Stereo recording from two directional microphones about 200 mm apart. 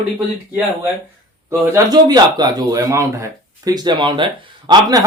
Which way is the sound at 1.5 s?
15° right (ahead or behind).